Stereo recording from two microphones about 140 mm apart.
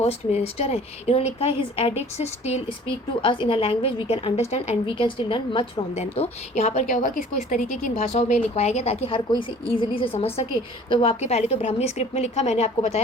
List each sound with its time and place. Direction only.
0.0 s a woman's voice: 50° left (ahead or behind)
3.2 s a woman's voice: 40° left (ahead or behind)
9.0 s a woman's voice: 35° left (ahead or behind)